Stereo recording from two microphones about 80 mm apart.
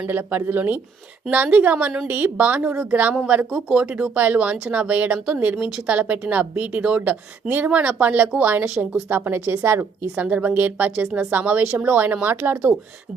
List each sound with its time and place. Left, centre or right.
0.1 s speech: right
10.2 s speech: centre